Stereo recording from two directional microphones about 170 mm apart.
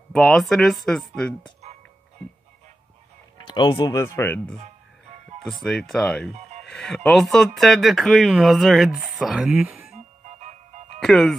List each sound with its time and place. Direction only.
0.1 s speech: centre (ahead or behind)
3.4 s speech: 25° left (ahead or behind)
3.9 s speech: 15° left (ahead or behind)
5.4 s speech: centre (ahead or behind)
6.3 s music: 40° right (ahead or behind)
6.7 s speech: 5° left (ahead or behind)
9.9 s music: 40° right (ahead or behind)
11.0 s speech: 5° left (ahead or behind)